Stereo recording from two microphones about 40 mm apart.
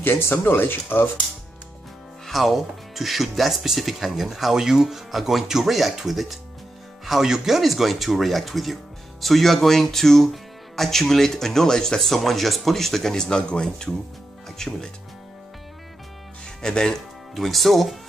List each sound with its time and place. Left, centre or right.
0.0 s speech: left
2.2 s speech: centre
16.6 s speech: centre